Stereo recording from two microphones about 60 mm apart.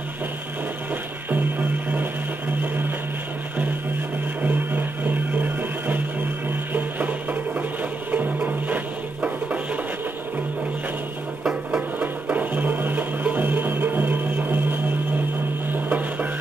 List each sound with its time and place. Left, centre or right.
1.3 s music: right
4.4 s music: right
12.0 s music: right
15.7 s a sound: right